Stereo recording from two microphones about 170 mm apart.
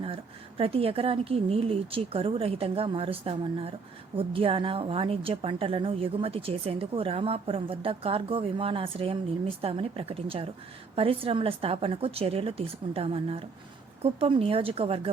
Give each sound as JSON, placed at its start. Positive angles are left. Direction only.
{"t": 0.0, "sound": "a woman's voice", "side_deg": -35}